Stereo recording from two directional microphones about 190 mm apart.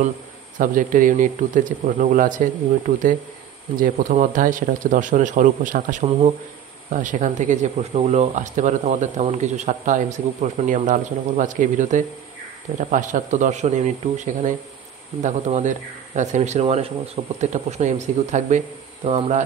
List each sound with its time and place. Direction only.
0.6 s speech: 45° right (ahead or behind)
3.8 s speech: 45° right (ahead or behind)